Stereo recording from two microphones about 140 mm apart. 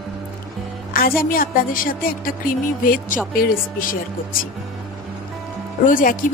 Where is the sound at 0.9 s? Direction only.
90° left.